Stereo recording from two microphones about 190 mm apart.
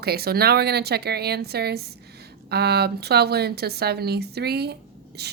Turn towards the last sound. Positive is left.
turn(degrees=-60)  # may be behind; listen again after turning